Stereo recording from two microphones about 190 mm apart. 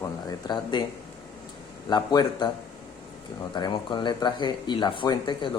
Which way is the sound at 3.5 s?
25° left (ahead or behind).